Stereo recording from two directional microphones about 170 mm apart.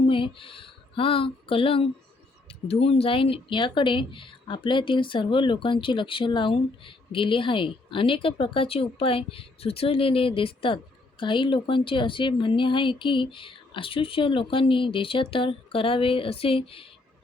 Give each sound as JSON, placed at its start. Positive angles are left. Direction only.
{"t": 0.1, "sound": "speech", "side_deg": 30}